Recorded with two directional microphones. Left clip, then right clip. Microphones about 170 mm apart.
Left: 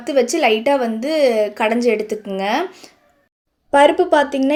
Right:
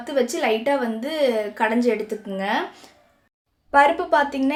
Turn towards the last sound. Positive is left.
turn(degrees=35)  # may be behind; listen again after turning